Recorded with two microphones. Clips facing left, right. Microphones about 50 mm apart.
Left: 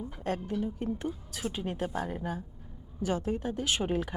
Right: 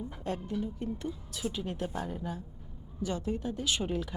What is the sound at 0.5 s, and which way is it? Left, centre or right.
Speech, centre.